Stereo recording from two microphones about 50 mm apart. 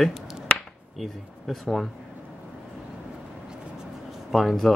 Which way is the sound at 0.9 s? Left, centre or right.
Centre.